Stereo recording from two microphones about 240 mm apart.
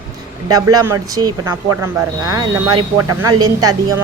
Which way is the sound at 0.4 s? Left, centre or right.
Centre.